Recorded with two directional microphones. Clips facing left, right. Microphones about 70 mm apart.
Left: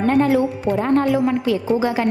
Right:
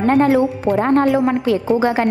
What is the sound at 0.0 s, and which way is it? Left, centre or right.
A woman's voice, right.